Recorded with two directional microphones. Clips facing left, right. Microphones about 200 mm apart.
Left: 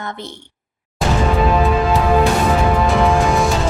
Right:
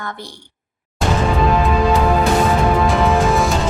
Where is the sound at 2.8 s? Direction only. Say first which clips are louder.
Even; centre (ahead or behind).